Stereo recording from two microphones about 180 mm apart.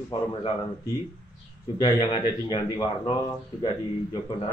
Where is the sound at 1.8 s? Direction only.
25° left (ahead or behind).